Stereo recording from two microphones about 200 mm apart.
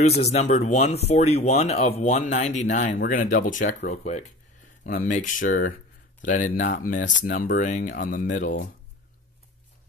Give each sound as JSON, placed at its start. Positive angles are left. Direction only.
{"t": 0.0, "sound": "speech", "side_deg": 30}